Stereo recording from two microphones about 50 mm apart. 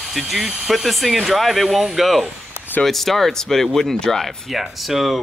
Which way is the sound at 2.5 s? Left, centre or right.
Left.